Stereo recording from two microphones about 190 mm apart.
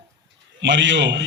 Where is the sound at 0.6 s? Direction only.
70° right (ahead or behind).